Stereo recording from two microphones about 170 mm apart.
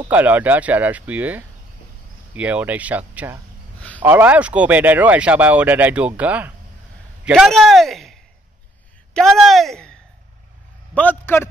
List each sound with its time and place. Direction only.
0.1 s speech: 10° right (ahead or behind)
11.0 s a man's voice: 10° left (ahead or behind)